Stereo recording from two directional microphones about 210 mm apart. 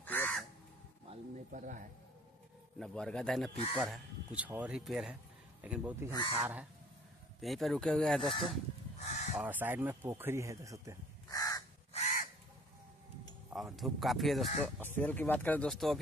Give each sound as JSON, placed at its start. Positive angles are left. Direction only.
{"t": 0.0, "sound": "crow", "side_deg": 10}
{"t": 1.5, "sound": "speech", "side_deg": -40}
{"t": 2.8, "sound": "speech", "side_deg": 5}
{"t": 9.0, "sound": "crow", "side_deg": 35}
{"t": 9.4, "sound": "speech", "side_deg": -10}
{"t": 11.2, "sound": "crow", "side_deg": 15}
{"t": 11.9, "sound": "crow", "side_deg": 35}
{"t": 13.5, "sound": "speech", "side_deg": 0}